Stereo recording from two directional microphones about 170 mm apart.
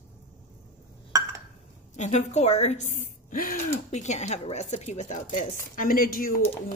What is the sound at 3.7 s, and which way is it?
Speech, 40° left (ahead or behind).